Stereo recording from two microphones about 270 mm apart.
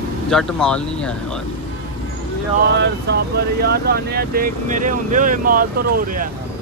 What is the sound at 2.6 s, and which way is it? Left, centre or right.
Speech, right.